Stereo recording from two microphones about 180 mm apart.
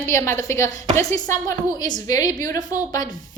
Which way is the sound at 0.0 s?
15° left (ahead or behind).